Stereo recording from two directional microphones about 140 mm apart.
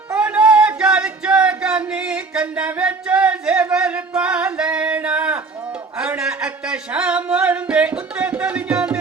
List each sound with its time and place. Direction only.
0.1 s music: 10° right (ahead or behind)